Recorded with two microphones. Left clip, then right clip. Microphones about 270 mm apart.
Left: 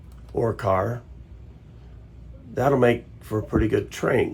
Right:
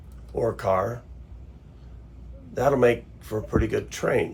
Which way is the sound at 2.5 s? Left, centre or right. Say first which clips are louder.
Left 1 dB; left.